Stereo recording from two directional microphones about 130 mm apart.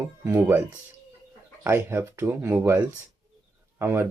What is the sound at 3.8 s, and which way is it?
Speech, 20° right (ahead or behind).